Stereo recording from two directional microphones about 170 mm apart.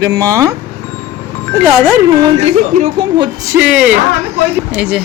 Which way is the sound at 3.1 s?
25° right (ahead or behind).